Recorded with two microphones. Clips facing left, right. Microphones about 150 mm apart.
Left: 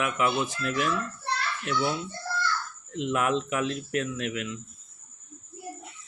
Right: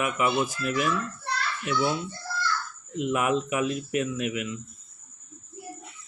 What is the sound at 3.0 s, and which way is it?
Speech, 5° right (ahead or behind).